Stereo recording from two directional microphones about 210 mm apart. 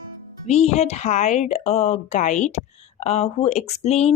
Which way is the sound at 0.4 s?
30° left (ahead or behind).